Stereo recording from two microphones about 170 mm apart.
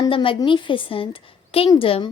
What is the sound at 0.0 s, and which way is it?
A woman's voice, 30° left (ahead or behind).